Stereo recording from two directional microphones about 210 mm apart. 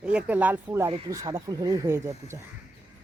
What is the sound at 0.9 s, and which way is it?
Speech, 20° right (ahead or behind).